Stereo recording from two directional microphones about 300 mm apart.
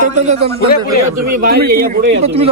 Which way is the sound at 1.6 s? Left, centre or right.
Right.